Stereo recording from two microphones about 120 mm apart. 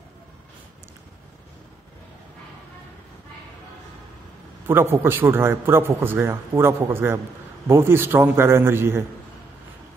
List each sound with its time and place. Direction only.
4.6 s a man's voice: 20° right (ahead or behind)